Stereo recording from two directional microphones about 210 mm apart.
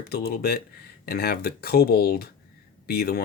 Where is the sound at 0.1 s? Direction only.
45° left (ahead or behind).